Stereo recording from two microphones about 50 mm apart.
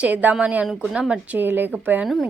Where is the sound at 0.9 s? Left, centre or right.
Centre.